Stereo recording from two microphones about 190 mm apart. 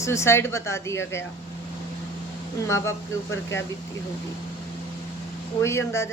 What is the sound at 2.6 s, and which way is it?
Speech, 15° left (ahead or behind).